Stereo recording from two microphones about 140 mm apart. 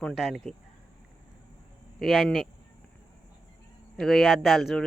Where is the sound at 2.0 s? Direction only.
Centre (ahead or behind).